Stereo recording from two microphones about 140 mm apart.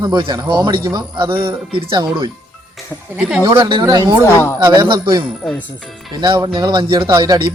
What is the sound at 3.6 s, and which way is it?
Speech, 30° right (ahead or behind).